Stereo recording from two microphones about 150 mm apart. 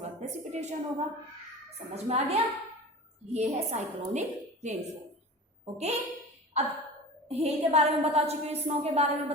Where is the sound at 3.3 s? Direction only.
50° right (ahead or behind).